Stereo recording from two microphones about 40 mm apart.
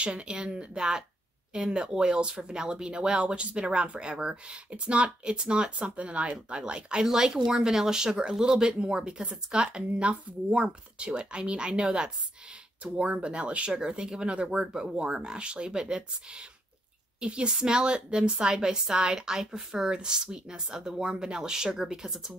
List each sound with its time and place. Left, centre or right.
0.0 s speech: right
6.3 s speech: right